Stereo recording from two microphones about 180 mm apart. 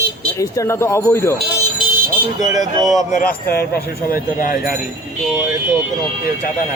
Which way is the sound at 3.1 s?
55° left (ahead or behind).